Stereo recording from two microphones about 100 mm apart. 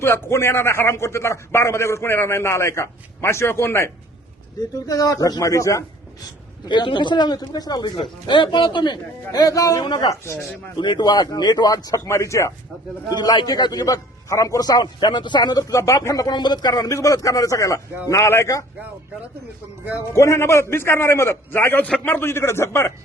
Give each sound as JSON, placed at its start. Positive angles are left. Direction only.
{"t": 0.0, "sound": "a man's voice", "side_deg": 25}
{"t": 4.9, "sound": "a man's voice", "side_deg": 40}
{"t": 6.7, "sound": "speech", "side_deg": 50}
{"t": 8.0, "sound": "speech", "side_deg": 55}
{"t": 9.3, "sound": "a man's voice", "side_deg": 40}
{"t": 9.8, "sound": "a man's voice", "side_deg": 45}
{"t": 13.1, "sound": "a man's voice", "side_deg": 45}
{"t": 20.1, "sound": "a man's voice", "side_deg": 25}
{"t": 22.1, "sound": "a man's voice", "side_deg": 25}